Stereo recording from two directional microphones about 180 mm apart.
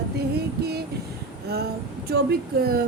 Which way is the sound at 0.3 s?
65° right (ahead or behind).